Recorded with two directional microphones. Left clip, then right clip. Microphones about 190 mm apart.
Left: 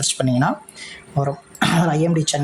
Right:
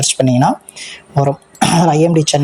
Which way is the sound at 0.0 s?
25° right (ahead or behind).